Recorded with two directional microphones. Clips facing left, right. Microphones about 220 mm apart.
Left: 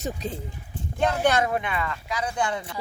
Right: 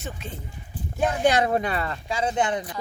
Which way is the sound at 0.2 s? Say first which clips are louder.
Left 6 dB; 40° left (ahead or behind).